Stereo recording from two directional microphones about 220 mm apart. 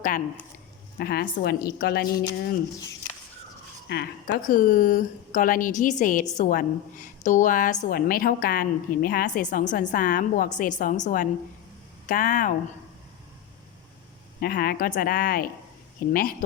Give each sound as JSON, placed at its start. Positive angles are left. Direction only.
{"t": 0.9, "sound": "a woman's voice", "side_deg": 45}
{"t": 3.8, "sound": "a woman's voice", "side_deg": 45}
{"t": 14.4, "sound": "a woman's voice", "side_deg": 45}